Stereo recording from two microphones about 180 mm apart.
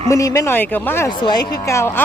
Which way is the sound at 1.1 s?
25° left (ahead or behind).